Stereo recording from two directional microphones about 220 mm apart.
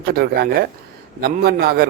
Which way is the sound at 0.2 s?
50° right (ahead or behind).